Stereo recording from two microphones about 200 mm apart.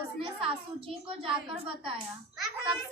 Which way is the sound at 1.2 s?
25° right (ahead or behind).